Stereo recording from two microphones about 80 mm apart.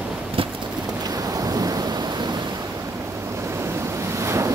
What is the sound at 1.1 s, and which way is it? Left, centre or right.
Thunder, right.